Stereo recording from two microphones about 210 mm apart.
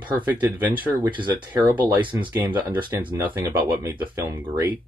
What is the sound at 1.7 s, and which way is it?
Speech, 10° right (ahead or behind).